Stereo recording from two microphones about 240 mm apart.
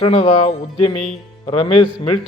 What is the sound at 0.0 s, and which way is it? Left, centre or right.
A man's voice, left.